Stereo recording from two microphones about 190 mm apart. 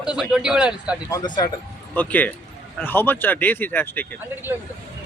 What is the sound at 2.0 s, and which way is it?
Speech, 10° left (ahead or behind).